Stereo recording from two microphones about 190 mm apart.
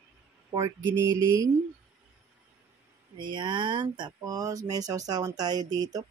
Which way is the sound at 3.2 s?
25° right (ahead or behind).